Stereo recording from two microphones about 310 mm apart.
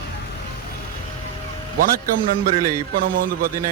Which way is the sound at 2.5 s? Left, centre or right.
Right.